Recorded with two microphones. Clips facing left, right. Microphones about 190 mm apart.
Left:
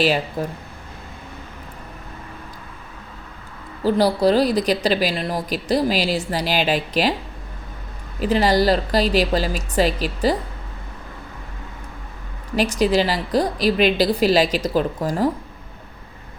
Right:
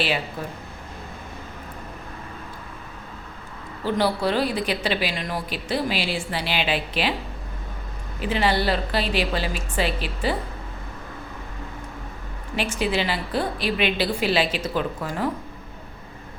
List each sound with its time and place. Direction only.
0.4 s a woman's voice: 40° left (ahead or behind)
3.8 s a woman's voice: 40° left (ahead or behind)
8.2 s a woman's voice: 40° left (ahead or behind)
12.5 s a woman's voice: 40° left (ahead or behind)